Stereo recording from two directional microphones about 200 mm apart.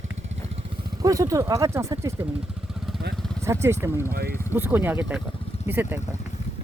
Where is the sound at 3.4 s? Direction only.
15° right (ahead or behind).